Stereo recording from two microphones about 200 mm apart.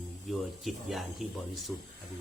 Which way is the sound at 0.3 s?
Centre (ahead or behind).